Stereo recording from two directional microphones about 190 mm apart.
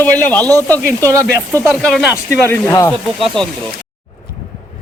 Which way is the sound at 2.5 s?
15° left (ahead or behind).